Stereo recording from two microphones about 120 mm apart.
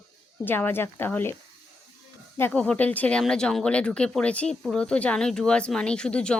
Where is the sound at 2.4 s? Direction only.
10° left (ahead or behind).